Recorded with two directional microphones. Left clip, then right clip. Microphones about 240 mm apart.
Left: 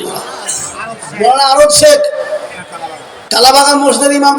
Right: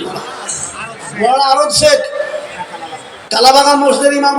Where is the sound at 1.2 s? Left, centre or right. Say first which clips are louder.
Left 4 dB; left.